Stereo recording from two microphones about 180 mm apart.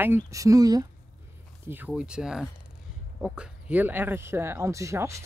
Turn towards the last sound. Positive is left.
turn(degrees=-15)  # may be behind; listen again after turning